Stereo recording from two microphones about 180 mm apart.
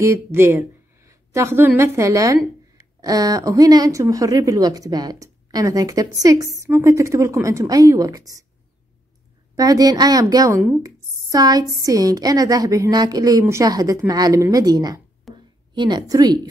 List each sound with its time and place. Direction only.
0.0 s speech: 15° right (ahead or behind)
9.6 s speech: 20° right (ahead or behind)
10.8 s a sound: 20° right (ahead or behind)
11.8 s speech: 20° right (ahead or behind)
15.3 s a sound: centre (ahead or behind)
15.7 s speech: 25° right (ahead or behind)